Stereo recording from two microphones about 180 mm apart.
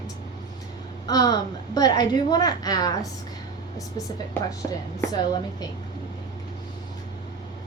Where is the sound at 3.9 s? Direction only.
20° left (ahead or behind).